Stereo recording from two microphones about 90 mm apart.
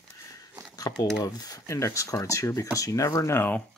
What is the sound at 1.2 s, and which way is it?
Speech, 45° left (ahead or behind).